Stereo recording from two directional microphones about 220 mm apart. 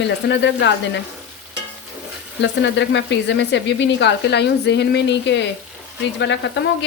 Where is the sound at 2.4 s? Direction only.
55° left (ahead or behind).